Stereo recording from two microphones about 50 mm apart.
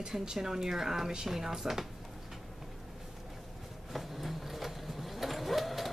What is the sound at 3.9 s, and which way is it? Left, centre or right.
Vehicle, centre.